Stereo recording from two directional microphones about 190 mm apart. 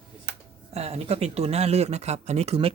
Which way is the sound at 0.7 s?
35° right (ahead or behind).